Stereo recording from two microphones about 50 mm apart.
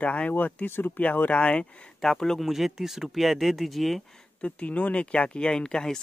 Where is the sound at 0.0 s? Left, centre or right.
Left.